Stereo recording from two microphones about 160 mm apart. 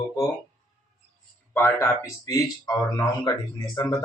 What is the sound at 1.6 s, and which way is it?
Speech, 15° left (ahead or behind).